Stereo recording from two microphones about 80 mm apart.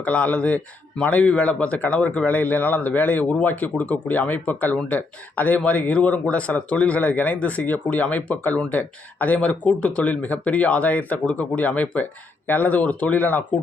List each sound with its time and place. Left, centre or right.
0.0 s speech: centre